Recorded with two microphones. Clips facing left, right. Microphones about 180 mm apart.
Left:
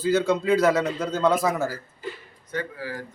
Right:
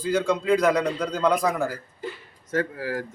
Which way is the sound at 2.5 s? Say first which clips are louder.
Right 5 dB; 45° right (ahead or behind).